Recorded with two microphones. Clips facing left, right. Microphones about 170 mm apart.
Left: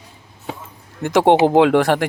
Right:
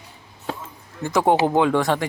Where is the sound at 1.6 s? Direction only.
75° left (ahead or behind).